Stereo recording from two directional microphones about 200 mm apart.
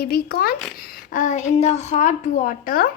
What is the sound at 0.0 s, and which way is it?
A woman's voice, 50° left (ahead or behind).